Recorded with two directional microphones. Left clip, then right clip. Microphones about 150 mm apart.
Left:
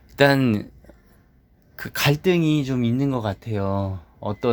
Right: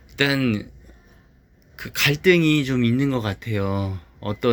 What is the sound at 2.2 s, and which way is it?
Speech, 20° left (ahead or behind).